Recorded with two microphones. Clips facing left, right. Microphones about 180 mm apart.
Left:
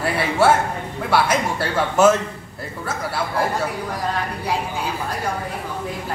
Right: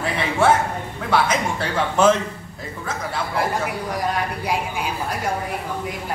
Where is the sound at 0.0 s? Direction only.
10° left (ahead or behind).